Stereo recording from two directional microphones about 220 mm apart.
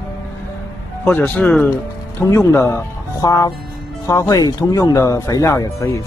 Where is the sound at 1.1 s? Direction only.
5° left (ahead or behind).